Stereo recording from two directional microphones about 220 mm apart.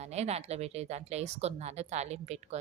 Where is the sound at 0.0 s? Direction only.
30° right (ahead or behind).